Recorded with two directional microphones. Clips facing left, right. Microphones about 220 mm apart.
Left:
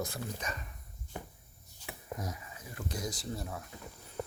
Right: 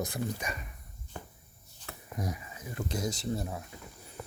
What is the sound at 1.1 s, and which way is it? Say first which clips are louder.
Shuffle: left 1 dB; 15° left (ahead or behind).